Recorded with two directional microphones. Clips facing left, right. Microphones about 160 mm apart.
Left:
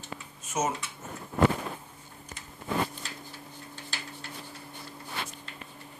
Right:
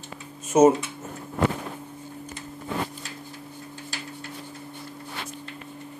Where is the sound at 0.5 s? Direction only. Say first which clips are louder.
Right 14 dB; 40° right (ahead or behind).